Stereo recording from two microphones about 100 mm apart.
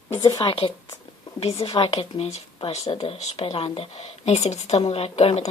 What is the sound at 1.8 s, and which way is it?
Speech, 75° left (ahead or behind).